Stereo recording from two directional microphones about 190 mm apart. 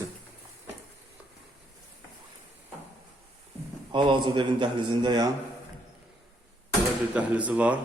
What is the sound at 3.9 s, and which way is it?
A man's voice, 25° right (ahead or behind).